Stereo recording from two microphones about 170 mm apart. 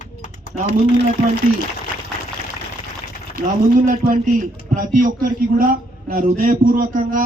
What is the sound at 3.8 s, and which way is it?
A man's voice, 50° right (ahead or behind).